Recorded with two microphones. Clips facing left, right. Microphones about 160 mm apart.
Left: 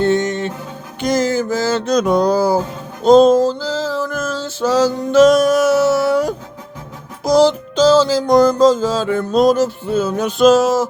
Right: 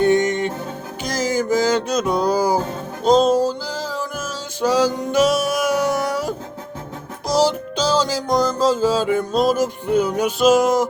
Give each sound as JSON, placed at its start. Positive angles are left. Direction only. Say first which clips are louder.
{"t": 0.0, "sound": "music", "louder": "even", "side_deg": -20}
{"t": 1.0, "sound": "music", "louder": "left 7 dB", "side_deg": 0}
{"t": 1.3, "sound": "music", "louder": "even", "side_deg": -15}
{"t": 2.3, "sound": "music", "louder": "left 3 dB", "side_deg": -15}
{"t": 3.0, "sound": "music", "louder": "left 6 dB", "side_deg": 0}
{"t": 7.3, "sound": "music", "louder": "left 6 dB", "side_deg": -10}
{"t": 8.3, "sound": "music", "louder": "left 7 dB", "side_deg": 0}
{"t": 9.3, "sound": "music", "louder": "left 7 dB", "side_deg": 0}
{"t": 9.6, "sound": "music", "louder": "left 1 dB", "side_deg": -15}